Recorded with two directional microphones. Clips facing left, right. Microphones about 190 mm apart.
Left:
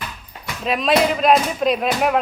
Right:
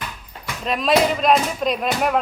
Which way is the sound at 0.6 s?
Centre (ahead or behind).